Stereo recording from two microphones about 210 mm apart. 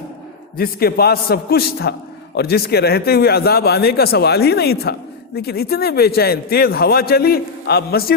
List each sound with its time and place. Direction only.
0.5 s a man's voice: 45° left (ahead or behind)